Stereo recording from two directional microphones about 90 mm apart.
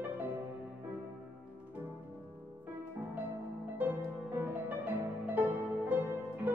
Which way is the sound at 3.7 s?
20° right (ahead or behind).